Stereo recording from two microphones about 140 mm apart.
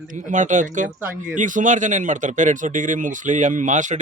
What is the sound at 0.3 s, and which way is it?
Speech, 60° right (ahead or behind).